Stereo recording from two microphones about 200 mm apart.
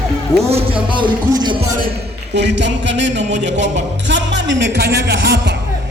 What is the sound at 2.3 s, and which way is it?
Music, 60° right (ahead or behind).